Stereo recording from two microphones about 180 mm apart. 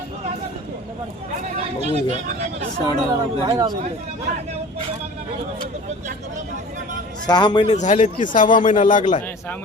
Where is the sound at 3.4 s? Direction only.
20° right (ahead or behind).